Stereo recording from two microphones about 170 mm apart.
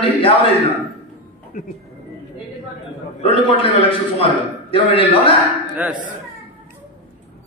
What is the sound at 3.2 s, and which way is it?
A man's voice, 30° left (ahead or behind).